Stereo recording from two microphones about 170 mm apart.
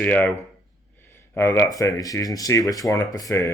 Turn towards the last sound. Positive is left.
turn(degrees=20)  # may be behind; listen again after turning